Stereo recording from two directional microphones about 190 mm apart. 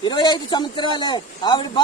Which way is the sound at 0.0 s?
20° left (ahead or behind).